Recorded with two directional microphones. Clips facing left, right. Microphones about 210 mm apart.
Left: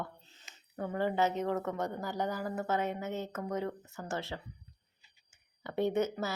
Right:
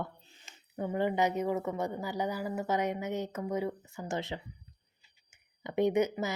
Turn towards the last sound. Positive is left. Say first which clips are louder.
# right 3 dB
turn(degrees=-15)  # may be behind; listen again after turning